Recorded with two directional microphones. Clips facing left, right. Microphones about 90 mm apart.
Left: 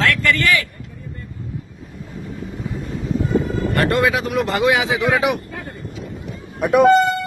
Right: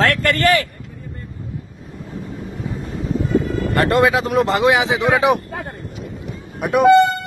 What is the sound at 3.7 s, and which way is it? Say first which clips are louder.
A man's voice: right 3 dB; 25° right (ahead or behind).